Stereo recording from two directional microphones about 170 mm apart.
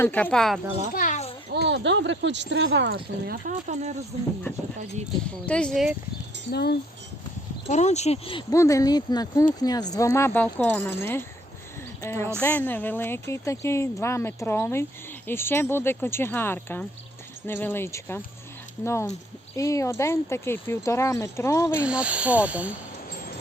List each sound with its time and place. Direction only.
0.0 s speech: 10° left (ahead or behind)
0.9 s children playing: 45° left (ahead or behind)
1.6 s speech: 90° right
3.7 s speech: 40° right (ahead or behind)
5.1 s speech: 5° left (ahead or behind)
6.5 s speech: 70° left (ahead or behind)
7.7 s speech: 40° left (ahead or behind)
8.5 s a woman's voice: 20° left (ahead or behind)
12.0 s a woman's voice: 15° left (ahead or behind)
21.8 s speech: 5° right (ahead or behind)